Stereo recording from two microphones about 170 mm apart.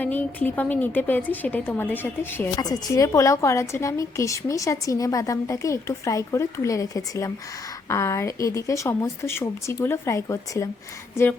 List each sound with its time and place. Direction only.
0.0 s speech: 10° left (ahead or behind)
2.6 s a woman's voice: 20° left (ahead or behind)